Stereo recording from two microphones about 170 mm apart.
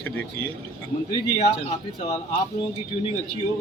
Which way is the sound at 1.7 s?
40° left (ahead or behind).